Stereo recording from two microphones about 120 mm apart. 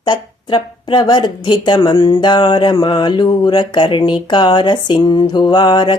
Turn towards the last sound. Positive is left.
turn(degrees=40)  # may be behind; listen again after turning